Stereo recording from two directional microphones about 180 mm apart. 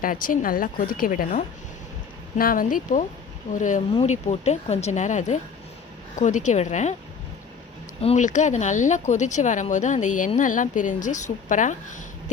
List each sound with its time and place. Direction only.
0.0 s speech: 50° left (ahead or behind)
8.0 s speech: 40° left (ahead or behind)